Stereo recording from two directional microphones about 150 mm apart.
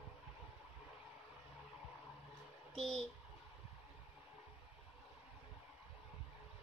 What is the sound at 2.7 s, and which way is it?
Speech, centre (ahead or behind).